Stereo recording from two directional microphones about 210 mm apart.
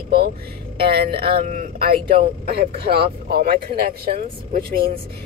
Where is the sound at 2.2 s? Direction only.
45° right (ahead or behind).